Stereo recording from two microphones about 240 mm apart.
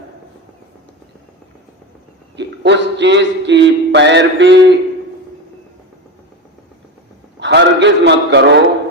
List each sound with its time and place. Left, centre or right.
2.3 s music: right
7.3 s a man's voice: right